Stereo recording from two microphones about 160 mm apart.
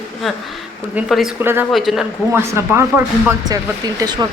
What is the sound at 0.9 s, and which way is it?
Speech, centre (ahead or behind).